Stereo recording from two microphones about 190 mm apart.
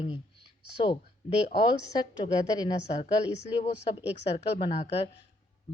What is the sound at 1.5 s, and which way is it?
A woman's voice, 25° left (ahead or behind).